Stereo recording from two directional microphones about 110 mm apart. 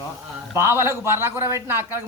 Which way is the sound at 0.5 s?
25° right (ahead or behind).